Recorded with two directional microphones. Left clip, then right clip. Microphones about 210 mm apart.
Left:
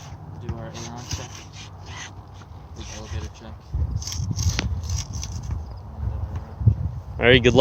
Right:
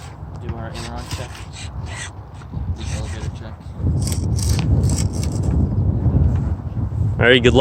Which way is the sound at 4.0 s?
15° right (ahead or behind).